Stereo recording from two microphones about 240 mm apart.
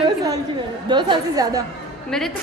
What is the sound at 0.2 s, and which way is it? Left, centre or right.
A woman's voice, centre.